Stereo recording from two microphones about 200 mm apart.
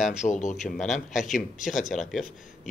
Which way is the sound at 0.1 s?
35° left (ahead or behind).